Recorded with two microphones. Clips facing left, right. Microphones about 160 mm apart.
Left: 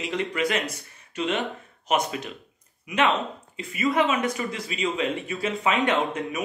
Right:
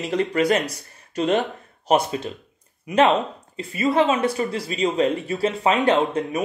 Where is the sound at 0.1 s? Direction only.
40° right (ahead or behind).